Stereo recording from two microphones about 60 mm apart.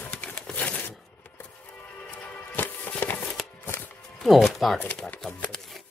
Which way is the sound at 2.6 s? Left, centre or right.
Left.